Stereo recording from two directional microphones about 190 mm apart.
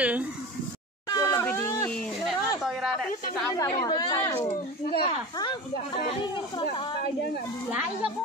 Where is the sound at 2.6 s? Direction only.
Centre (ahead or behind).